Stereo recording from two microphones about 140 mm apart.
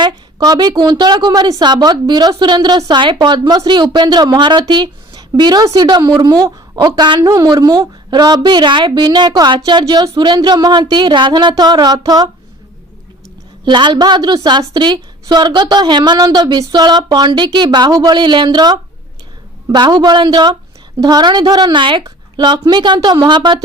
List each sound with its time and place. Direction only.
0.0 s a woman's voice: 30° right (ahead or behind)
13.7 s a woman's voice: 35° right (ahead or behind)